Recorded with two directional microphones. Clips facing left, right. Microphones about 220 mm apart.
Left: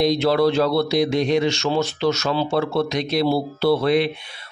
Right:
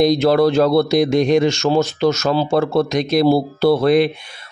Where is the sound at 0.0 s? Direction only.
45° right (ahead or behind).